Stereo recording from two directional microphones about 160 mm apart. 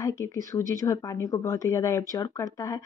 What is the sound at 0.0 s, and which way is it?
A woman's voice, 20° left (ahead or behind).